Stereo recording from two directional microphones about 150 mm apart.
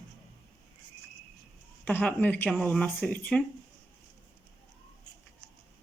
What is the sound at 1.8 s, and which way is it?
Speech, 10° left (ahead or behind).